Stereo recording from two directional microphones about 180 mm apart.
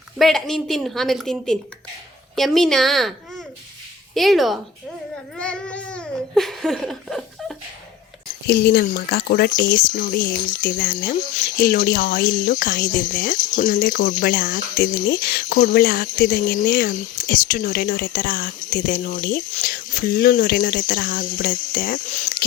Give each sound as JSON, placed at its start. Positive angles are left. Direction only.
{"t": 0.2, "sound": "a woman's voice", "side_deg": 0}
{"t": 5.4, "sound": "a sound", "side_deg": 5}
{"t": 8.4, "sound": "speech", "side_deg": 60}